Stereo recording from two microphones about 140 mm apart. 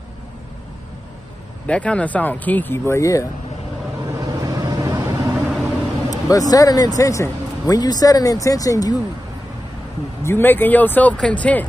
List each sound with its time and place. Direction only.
1.7 s speech: 10° left (ahead or behind)
4.2 s vehicle: 25° right (ahead or behind)
6.0 s speech: 25° left (ahead or behind)
10.2 s speech: 15° left (ahead or behind)